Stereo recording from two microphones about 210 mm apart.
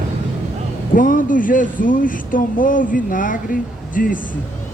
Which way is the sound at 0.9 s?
40° left (ahead or behind).